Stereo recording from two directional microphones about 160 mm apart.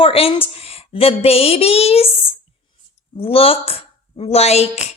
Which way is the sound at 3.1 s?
35° left (ahead or behind).